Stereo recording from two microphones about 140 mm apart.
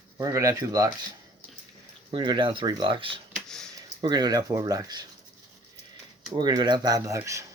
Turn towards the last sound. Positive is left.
turn(degrees=-20)  # may be behind; listen again after turning